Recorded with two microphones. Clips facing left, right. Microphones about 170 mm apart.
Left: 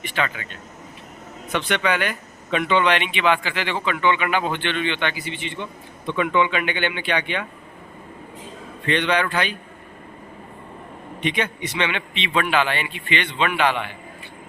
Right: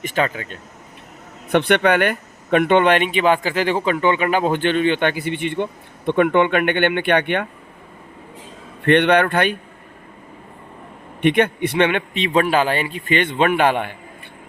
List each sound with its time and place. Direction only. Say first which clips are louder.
0.0 s speech: right 5 dB; 40° right (ahead or behind)
1.5 s speech: right 7 dB; 60° right (ahead or behind)
8.8 s speech: right 7 dB; 60° right (ahead or behind)
11.2 s speech: right 8 dB; 60° right (ahead or behind)